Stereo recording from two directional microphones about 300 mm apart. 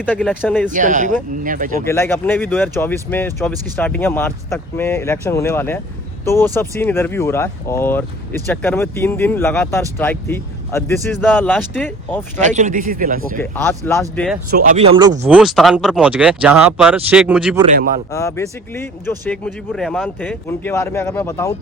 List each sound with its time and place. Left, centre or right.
0.0 s speech: centre
0.7 s speech: right
1.8 s speech: centre
12.4 s speech: right
13.4 s speech: centre
14.5 s speech: right; by 17.6 s centre
18.1 s speech: centre